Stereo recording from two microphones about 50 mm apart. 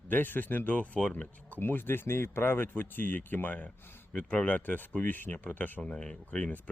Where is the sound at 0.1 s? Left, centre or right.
Left.